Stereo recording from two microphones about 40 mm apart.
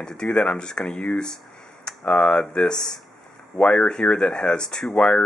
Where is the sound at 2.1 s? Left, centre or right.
Left.